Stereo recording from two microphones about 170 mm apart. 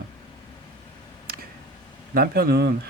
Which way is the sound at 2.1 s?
65° right (ahead or behind).